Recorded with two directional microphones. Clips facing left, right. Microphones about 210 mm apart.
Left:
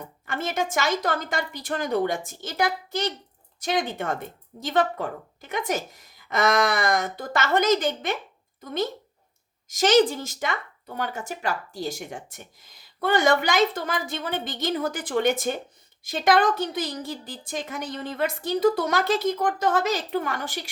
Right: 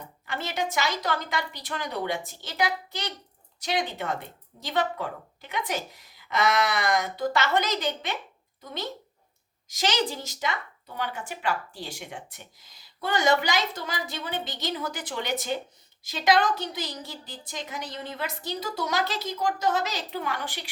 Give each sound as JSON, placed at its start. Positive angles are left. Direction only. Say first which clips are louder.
{"t": 0.3, "sound": "a woman's voice", "louder": "left 3 dB", "side_deg": 50}